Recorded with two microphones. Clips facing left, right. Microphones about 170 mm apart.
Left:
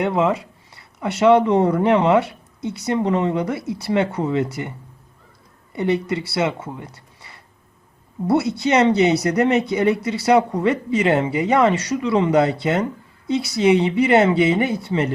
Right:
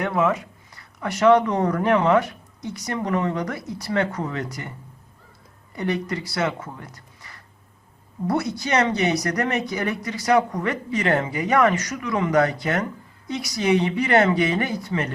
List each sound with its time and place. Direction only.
0.0 s speech: 25° left (ahead or behind)
5.7 s speech: 25° left (ahead or behind)
6.9 s a sound: 30° left (ahead or behind)
8.3 s speech: 25° left (ahead or behind)